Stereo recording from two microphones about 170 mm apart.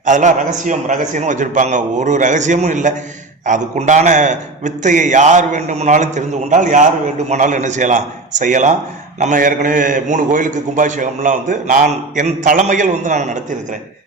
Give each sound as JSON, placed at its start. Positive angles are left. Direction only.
{"t": 0.0, "sound": "a man's voice", "side_deg": -45}